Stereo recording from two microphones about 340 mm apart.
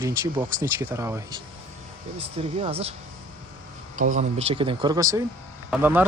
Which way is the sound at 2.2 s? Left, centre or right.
Centre.